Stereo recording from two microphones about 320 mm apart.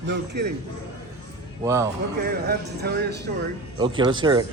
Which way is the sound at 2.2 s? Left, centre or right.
Right.